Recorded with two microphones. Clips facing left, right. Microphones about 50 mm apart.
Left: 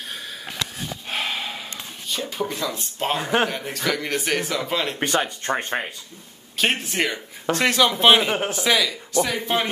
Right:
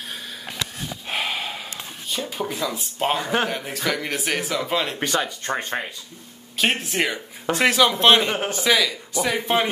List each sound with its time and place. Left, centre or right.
1.0 s snort: centre
2.0 s a man's voice: centre
5.0 s speech: left
6.6 s a man's voice: centre